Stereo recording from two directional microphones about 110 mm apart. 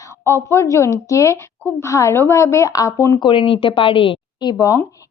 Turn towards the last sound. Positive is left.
turn(degrees=30)  # may be behind; listen again after turning